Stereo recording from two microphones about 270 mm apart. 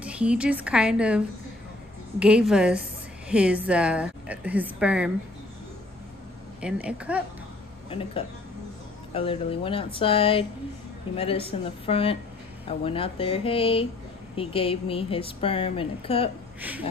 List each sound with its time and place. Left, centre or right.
0.0 s a woman's voice: centre
6.6 s a woman's voice: centre
7.9 s a woman's voice: left